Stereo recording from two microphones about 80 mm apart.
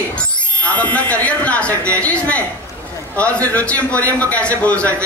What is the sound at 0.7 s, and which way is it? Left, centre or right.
A man's voice, centre.